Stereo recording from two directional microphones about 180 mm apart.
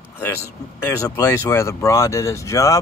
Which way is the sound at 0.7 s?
15° left (ahead or behind).